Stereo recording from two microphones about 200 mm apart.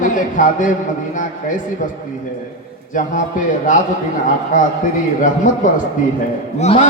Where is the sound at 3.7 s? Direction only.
40° left (ahead or behind).